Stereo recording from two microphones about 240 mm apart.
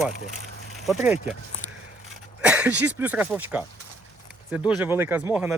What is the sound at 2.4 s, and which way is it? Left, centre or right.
Speech, centre.